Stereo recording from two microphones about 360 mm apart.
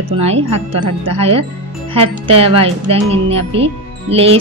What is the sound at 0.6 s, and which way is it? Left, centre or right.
Speech, right.